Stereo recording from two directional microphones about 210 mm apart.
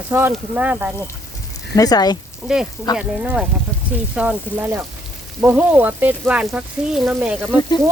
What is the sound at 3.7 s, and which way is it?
Sizzle, 5° left (ahead or behind).